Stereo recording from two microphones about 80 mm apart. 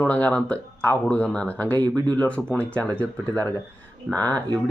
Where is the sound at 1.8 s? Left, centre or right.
Right.